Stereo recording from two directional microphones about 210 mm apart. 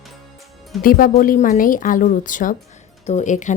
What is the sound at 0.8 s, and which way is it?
Speech, 40° left (ahead or behind).